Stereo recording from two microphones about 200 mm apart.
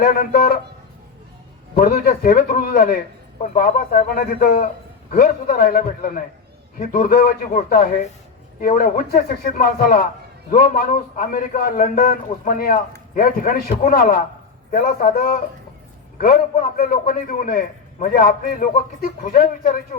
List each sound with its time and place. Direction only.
0.0 s a man's voice: 45° left (ahead or behind)
1.7 s a man's voice: 50° left (ahead or behind)